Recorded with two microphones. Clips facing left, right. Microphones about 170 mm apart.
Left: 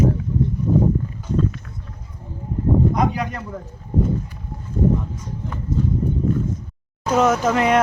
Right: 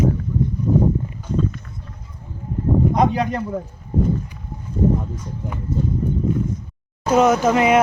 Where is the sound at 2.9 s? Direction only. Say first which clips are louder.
Right 3 dB; 25° right (ahead or behind).